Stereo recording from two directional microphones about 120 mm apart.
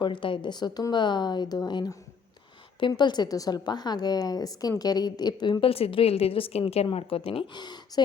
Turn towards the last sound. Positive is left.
turn(degrees=35)  # may be behind; listen again after turning